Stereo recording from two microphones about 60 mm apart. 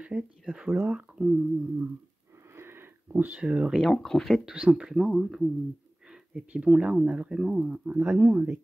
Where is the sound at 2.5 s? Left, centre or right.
Right.